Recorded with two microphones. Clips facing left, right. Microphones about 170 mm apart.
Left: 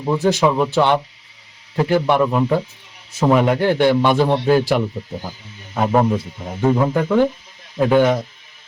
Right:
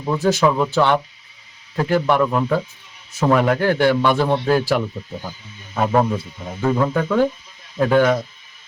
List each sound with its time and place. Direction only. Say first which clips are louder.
0.0 s a man's voice: left 1 dB; 15° left (ahead or behind)